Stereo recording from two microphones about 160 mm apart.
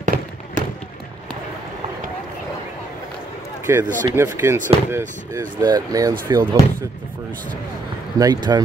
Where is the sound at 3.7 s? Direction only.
15° right (ahead or behind).